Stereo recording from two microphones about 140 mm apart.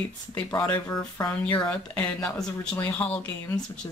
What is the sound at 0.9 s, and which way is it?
Speech, 20° left (ahead or behind).